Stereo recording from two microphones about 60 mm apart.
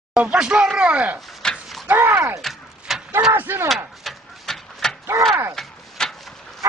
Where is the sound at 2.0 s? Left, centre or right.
Right.